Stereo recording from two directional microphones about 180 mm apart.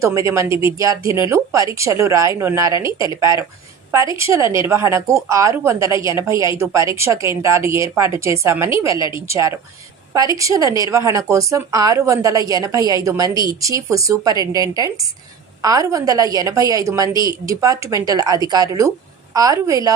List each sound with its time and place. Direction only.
0.0 s a woman's voice: 15° right (ahead or behind)